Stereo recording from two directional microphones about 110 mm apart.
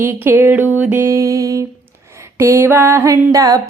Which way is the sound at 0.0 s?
20° right (ahead or behind).